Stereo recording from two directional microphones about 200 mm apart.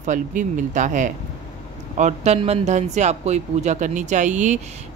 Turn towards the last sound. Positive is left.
turn(degrees=-35)  # may be behind; listen again after turning